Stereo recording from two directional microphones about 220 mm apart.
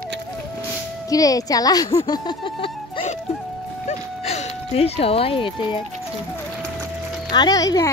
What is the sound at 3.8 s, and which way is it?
Music, 30° left (ahead or behind).